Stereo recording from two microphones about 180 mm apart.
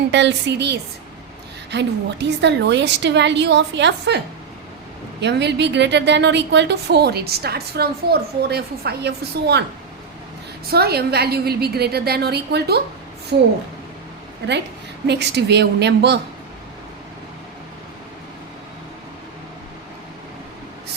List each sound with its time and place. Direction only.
0.1 s a woman's voice: 80° right
5.2 s a woman's voice: 70° right (ahead or behind)
10.7 s a woman's voice: 60° right (ahead or behind)
15.0 s a woman's voice: 70° right (ahead or behind)